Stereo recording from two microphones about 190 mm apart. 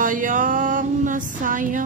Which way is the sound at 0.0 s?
45° right (ahead or behind).